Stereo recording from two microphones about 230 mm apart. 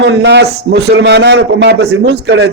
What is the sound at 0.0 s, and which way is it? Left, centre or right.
A man's voice, right.